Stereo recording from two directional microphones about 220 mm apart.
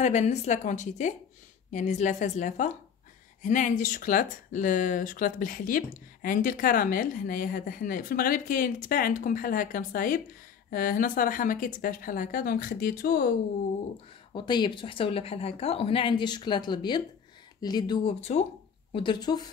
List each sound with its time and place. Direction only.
0.0 s speech: 30° left (ahead or behind)
14.3 s speech: 20° left (ahead or behind)